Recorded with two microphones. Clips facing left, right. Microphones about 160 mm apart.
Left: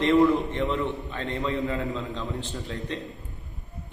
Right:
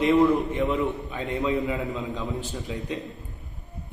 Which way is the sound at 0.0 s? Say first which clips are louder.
Even; centre (ahead or behind).